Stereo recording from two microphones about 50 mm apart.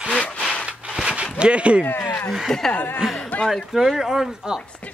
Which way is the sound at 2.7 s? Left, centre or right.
Left.